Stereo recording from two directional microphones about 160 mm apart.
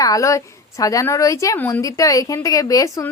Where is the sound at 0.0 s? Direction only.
20° left (ahead or behind).